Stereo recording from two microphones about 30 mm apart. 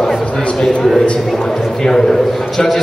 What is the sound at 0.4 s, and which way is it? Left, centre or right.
Speech, left.